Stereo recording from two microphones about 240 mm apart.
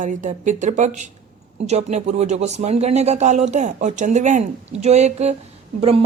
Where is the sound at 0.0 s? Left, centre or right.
Right.